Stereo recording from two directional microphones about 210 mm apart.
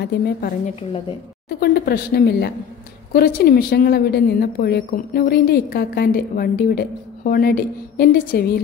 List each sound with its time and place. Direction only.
0.0 s a woman's voice: 45° left (ahead or behind)
1.6 s a woman's voice: 50° left (ahead or behind)